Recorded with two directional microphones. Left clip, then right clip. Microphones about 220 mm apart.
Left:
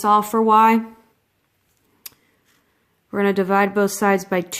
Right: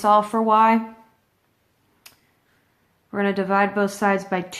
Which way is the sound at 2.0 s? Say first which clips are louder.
Left 6 dB; 35° left (ahead or behind).